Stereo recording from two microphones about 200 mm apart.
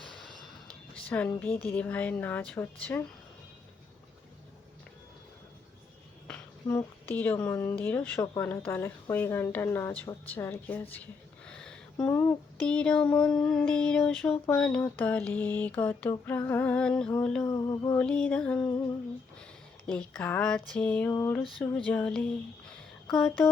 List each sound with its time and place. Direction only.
0.0 s a sound: centre (ahead or behind)
1.4 s speech: 10° left (ahead or behind)
6.2 s speech: 10° left (ahead or behind)
17.4 s a sound: 20° left (ahead or behind)
18.0 s music: 5° left (ahead or behind)
19.9 s speech: 5° left (ahead or behind)